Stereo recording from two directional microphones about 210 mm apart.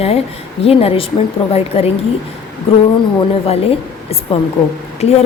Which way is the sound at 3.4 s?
30° left (ahead or behind).